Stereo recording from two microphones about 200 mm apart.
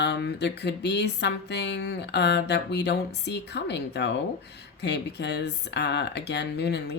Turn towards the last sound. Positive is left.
turn(degrees=55)  # may be behind; listen again after turning